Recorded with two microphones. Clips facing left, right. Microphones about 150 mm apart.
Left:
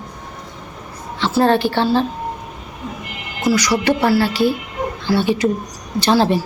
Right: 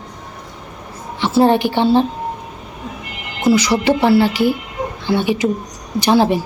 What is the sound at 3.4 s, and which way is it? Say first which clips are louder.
A woman's voice: right 2 dB; 25° right (ahead or behind).